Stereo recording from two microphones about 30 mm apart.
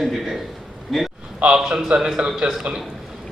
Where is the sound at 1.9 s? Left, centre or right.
Centre.